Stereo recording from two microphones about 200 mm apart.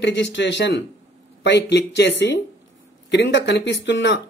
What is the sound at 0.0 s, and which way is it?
A man's voice, 60° left (ahead or behind).